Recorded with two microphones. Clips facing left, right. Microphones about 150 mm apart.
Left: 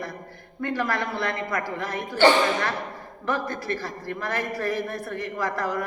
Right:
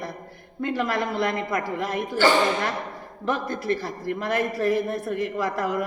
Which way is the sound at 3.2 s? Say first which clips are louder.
Right 2 dB; 20° right (ahead or behind).